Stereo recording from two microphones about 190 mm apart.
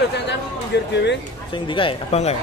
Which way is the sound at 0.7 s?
65° left (ahead or behind).